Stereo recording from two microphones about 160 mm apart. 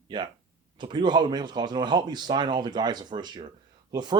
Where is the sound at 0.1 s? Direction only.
30° right (ahead or behind).